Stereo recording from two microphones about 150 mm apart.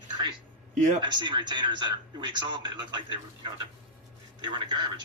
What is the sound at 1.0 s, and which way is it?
A man's voice, 30° right (ahead or behind).